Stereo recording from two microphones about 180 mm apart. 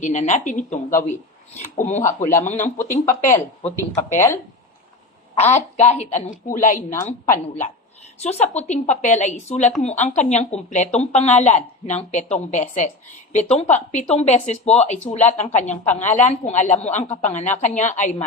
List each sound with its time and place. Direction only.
0.0 s speech: 40° left (ahead or behind)
3.9 s a woman's voice: 15° left (ahead or behind)
5.7 s speech: 35° left (ahead or behind)
6.9 s a woman's voice: 15° left (ahead or behind)
8.2 s speech: 35° left (ahead or behind)